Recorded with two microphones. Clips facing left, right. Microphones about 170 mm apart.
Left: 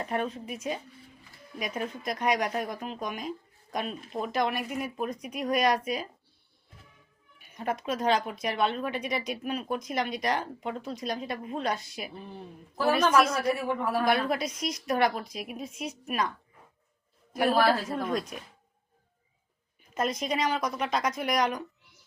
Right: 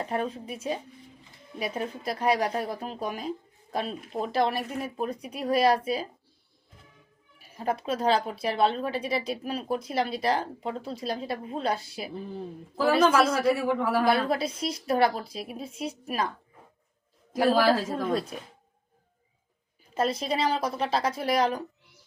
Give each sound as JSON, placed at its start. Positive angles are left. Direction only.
{"t": 0.0, "sound": "speech", "side_deg": -30}
{"t": 7.3, "sound": "a woman's voice", "side_deg": -30}
{"t": 13.4, "sound": "a man's voice", "side_deg": -90}
{"t": 14.0, "sound": "speech", "side_deg": -30}
{"t": 17.5, "sound": "a man's voice", "side_deg": -90}
{"t": 17.9, "sound": "speech", "side_deg": -30}
{"t": 19.9, "sound": "speech", "side_deg": -30}